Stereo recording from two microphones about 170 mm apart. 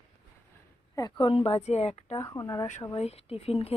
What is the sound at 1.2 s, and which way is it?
A woman's voice, 35° left (ahead or behind).